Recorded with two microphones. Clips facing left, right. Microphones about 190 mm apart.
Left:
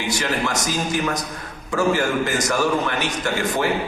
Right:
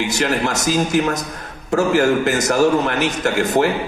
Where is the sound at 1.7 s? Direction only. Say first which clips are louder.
Right 5 dB; 45° right (ahead or behind).